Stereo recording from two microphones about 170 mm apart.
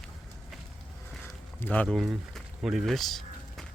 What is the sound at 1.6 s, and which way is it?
Speech, 10° left (ahead or behind).